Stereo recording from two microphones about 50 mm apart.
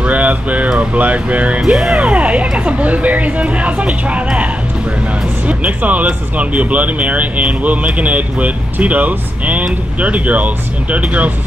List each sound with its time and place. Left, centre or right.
0.0 s a sound: right
0.7 s speech: right
1.6 s music: centre
2.0 s speech: right
5.5 s speech: right